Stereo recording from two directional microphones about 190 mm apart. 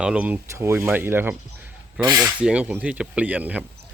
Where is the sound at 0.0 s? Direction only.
5° right (ahead or behind).